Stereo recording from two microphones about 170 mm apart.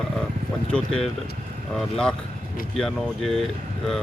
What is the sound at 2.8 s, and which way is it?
Speech, 5° left (ahead or behind).